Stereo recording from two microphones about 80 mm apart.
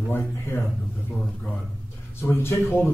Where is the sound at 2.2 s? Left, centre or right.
Left.